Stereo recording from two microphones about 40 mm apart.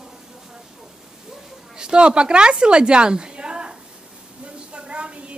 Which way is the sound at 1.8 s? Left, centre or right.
Right.